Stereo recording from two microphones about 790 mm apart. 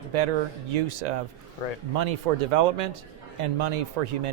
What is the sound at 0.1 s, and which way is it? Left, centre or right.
Speech, right.